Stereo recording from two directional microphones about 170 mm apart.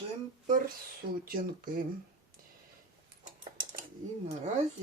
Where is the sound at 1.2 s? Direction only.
60° right (ahead or behind).